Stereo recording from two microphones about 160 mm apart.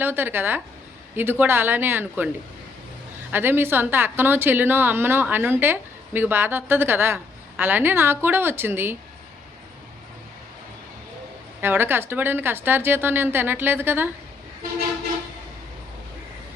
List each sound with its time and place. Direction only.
0.0 s a woman's voice: 15° right (ahead or behind)
3.3 s a woman's voice: 15° right (ahead or behind)
11.6 s a woman's voice: 15° right (ahead or behind)